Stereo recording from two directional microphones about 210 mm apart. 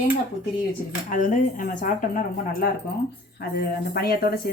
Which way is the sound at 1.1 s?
40° left (ahead or behind).